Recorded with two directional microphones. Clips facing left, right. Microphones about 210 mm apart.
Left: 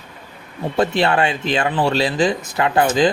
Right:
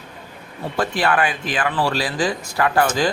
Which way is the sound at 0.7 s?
25° left (ahead or behind).